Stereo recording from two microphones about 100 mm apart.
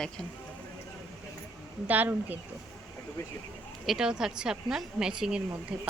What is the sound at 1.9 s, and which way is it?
Speech, 20° right (ahead or behind).